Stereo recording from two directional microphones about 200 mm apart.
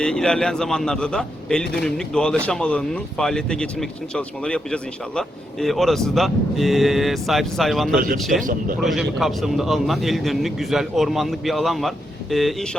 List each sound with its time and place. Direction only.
0.0 s a man's voice: 5° left (ahead or behind)
7.9 s speech: 45° right (ahead or behind)
8.2 s a man's voice: centre (ahead or behind)
8.4 s speech: 40° right (ahead or behind)
8.8 s a man's voice: centre (ahead or behind)